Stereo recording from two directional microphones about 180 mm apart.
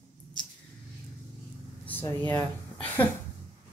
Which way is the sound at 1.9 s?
10° left (ahead or behind).